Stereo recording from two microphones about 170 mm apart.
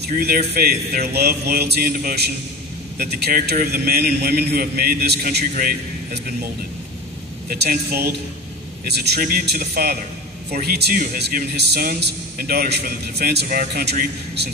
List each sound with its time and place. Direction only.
0.0 s a man's voice: 65° right (ahead or behind)
7.4 s a man's voice: 65° right (ahead or behind)